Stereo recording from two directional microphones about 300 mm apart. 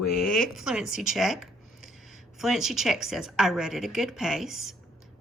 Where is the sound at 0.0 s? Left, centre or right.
Left.